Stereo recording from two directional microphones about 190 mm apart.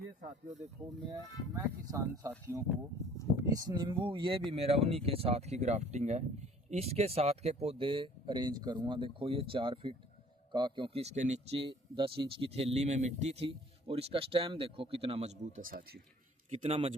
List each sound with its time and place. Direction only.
1.5 s speech: 15° right (ahead or behind)
3.0 s speech: 15° left (ahead or behind)
3.3 s speech: 20° right (ahead or behind)
15.6 s speech: 50° right (ahead or behind)
16.6 s speech: 30° right (ahead or behind)